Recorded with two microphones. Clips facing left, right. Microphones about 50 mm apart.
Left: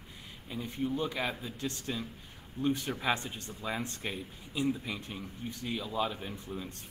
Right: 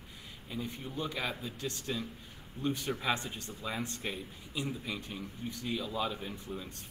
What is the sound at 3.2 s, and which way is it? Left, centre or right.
Speech, left.